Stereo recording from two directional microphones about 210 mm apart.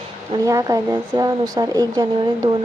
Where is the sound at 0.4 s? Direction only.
15° right (ahead or behind).